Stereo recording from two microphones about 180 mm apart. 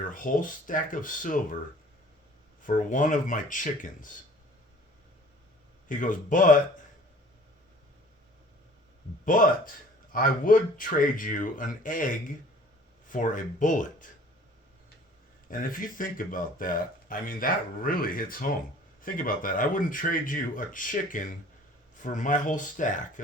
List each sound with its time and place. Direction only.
0.0 s speech: 50° left (ahead or behind)
2.6 s speech: 45° left (ahead or behind)
5.9 s speech: 45° left (ahead or behind)
9.2 s speech: 50° left (ahead or behind)
15.4 s speech: 50° left (ahead or behind)